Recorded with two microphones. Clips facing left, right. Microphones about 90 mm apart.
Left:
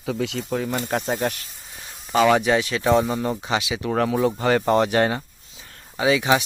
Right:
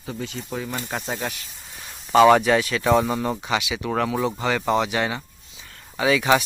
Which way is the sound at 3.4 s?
30° left (ahead or behind).